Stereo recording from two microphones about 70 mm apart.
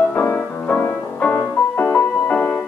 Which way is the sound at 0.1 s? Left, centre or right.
Left.